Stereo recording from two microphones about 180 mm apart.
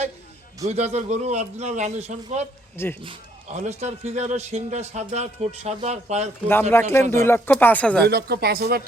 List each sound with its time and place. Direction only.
0.7 s a man's voice: 40° right (ahead or behind)
3.6 s a man's voice: 40° right (ahead or behind)
6.5 s speech: 10° left (ahead or behind)
8.0 s speech: 60° right (ahead or behind)